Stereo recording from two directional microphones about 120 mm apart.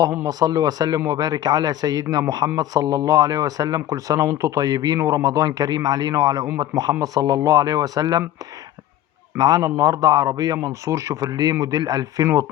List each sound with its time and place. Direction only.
0.0 s speech: 25° right (ahead or behind)
9.4 s a man's voice: 30° right (ahead or behind)